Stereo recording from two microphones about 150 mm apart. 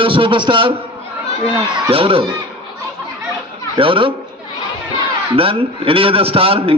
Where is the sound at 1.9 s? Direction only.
40° right (ahead or behind).